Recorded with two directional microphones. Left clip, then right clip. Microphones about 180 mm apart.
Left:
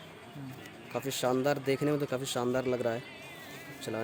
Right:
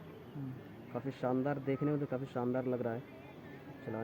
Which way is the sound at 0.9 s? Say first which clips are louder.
Left 6 dB; 60° left (ahead or behind).